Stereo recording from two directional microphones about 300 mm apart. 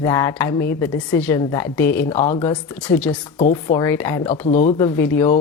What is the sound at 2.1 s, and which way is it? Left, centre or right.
Speech, left.